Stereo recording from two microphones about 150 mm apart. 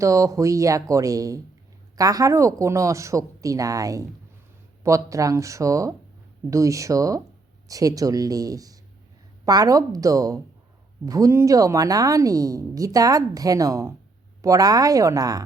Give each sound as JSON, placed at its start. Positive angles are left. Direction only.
{"t": 0.0, "sound": "a woman's voice", "side_deg": -20}